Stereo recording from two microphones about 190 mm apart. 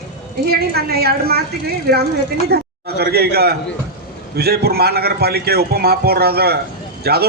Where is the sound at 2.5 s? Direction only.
55° right (ahead or behind).